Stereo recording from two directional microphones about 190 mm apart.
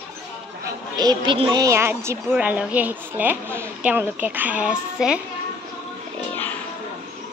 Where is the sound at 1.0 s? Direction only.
25° right (ahead or behind); by 5.2 s 5° right (ahead or behind).